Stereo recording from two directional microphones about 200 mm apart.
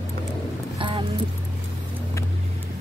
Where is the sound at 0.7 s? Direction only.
25° right (ahead or behind).